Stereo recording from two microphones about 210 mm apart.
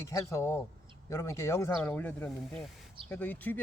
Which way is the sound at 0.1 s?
15° left (ahead or behind).